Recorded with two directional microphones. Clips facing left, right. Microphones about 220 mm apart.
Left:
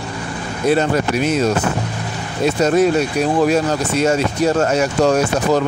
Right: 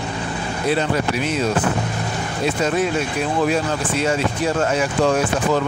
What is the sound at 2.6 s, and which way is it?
Speech, 40° left (ahead or behind).